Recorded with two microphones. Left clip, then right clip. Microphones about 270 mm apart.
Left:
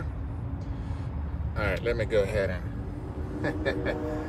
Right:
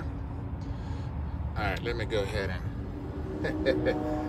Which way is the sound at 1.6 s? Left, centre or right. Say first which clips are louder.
Left 4 dB; centre.